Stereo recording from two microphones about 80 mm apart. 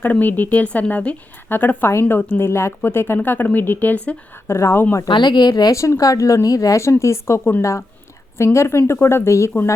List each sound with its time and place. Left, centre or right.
0.0 s speech: left
4.4 s speech: left
5.0 s speech: left
5.7 s speech: left